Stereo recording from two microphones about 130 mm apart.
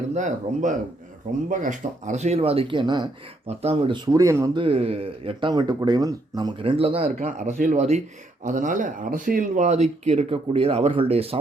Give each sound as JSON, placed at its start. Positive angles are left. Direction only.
{"t": 0.1, "sound": "speech", "side_deg": -70}
{"t": 1.5, "sound": "speech", "side_deg": -85}
{"t": 3.4, "sound": "speech", "side_deg": -50}
{"t": 3.9, "sound": "speech", "side_deg": -30}
{"t": 4.5, "sound": "speech", "side_deg": -45}
{"t": 6.6, "sound": "speech", "side_deg": -45}
{"t": 7.3, "sound": "speech", "side_deg": -80}